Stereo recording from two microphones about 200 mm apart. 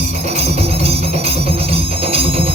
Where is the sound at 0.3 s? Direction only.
30° right (ahead or behind).